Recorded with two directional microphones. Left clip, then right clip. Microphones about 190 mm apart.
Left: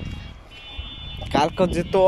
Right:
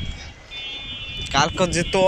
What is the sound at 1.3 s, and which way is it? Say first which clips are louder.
Speech: even; 20° left (ahead or behind).